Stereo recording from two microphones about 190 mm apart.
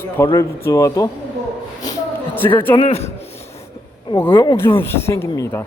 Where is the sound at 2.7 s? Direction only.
35° left (ahead or behind).